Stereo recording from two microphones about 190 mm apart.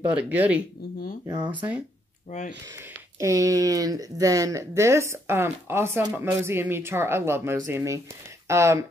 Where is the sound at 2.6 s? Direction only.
15° right (ahead or behind).